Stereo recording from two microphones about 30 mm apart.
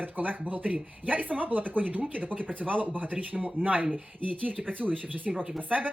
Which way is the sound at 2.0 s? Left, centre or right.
Right.